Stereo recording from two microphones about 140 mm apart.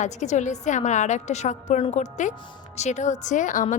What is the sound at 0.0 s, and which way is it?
A woman's voice, 60° left (ahead or behind).